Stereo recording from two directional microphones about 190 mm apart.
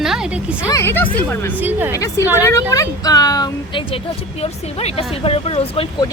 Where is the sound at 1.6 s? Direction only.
10° right (ahead or behind).